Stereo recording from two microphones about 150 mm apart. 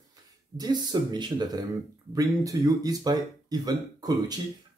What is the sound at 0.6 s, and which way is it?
Speech, 30° right (ahead or behind).